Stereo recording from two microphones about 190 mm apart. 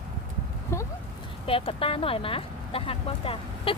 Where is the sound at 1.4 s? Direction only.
30° left (ahead or behind).